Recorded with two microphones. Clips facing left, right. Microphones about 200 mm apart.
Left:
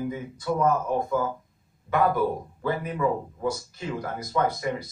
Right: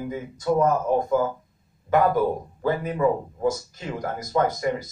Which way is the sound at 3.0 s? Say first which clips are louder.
Right 4 dB; 45° right (ahead or behind).